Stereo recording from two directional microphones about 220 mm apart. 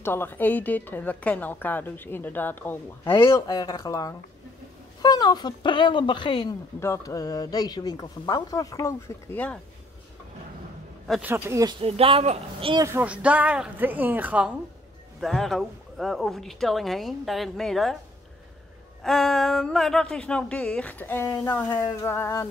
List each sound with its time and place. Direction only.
0.0 s a woman's voice: 10° left (ahead or behind)
11.1 s speech: 5° right (ahead or behind)
11.8 s speech: 25° right (ahead or behind)
12.8 s speech: 10° right (ahead or behind)
19.0 s speech: centre (ahead or behind)